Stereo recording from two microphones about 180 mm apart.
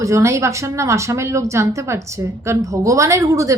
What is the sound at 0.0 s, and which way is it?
A woman's voice, 15° right (ahead or behind).